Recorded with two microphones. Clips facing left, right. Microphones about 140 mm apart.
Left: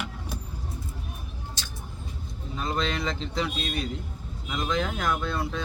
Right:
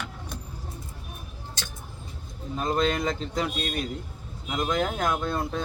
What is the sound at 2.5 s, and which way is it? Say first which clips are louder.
Speech: right 4 dB; 45° right (ahead or behind).